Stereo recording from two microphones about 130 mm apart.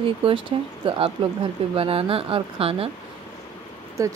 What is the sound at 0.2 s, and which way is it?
Speech, 40° right (ahead or behind).